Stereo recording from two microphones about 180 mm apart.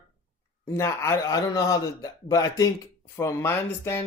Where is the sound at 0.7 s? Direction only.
15° left (ahead or behind).